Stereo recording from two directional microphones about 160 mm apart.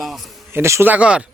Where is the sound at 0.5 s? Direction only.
15° right (ahead or behind).